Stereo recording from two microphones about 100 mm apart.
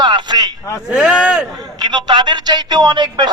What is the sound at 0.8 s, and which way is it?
Speech, 5° right (ahead or behind).